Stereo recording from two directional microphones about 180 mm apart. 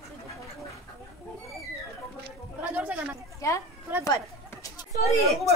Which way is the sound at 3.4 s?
15° left (ahead or behind).